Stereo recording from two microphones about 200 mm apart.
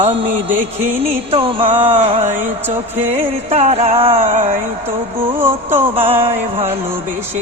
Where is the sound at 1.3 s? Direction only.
25° right (ahead or behind).